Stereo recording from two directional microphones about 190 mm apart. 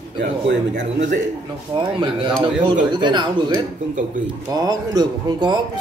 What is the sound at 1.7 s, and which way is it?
A man's voice, 25° right (ahead or behind).